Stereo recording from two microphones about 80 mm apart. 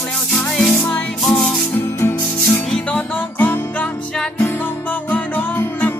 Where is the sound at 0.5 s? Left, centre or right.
Centre.